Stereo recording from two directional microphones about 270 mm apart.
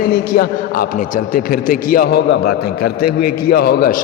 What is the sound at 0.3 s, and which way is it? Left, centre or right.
A man's voice, left.